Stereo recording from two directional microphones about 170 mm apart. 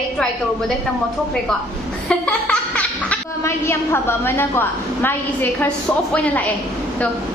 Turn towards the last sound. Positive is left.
turn(degrees=10)  # may be behind; listen again after turning